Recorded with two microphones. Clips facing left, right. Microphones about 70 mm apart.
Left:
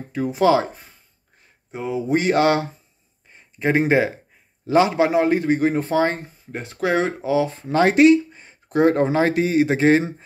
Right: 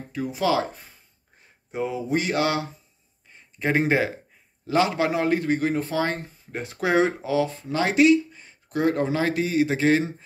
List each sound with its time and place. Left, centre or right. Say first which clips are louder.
0.1 s speech: left 6 dB; left
1.7 s speech: left 1 dB; centre
2.0 s speech: left 8 dB; left
3.3 s a man's voice: left 4 dB; centre; by 6.2 s left
6.5 s speech: left 1 dB; centre
7.2 s a man's voice: left 3 dB; centre
7.6 s speech: left 6 dB; left